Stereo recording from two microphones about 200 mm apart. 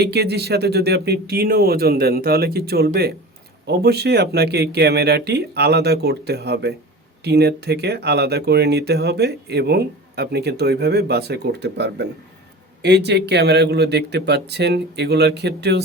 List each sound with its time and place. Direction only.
0.0 s speech: 55° right (ahead or behind)